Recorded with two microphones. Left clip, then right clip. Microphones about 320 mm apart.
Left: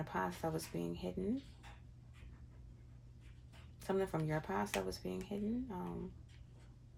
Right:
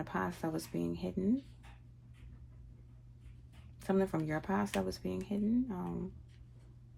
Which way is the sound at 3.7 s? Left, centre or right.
Right.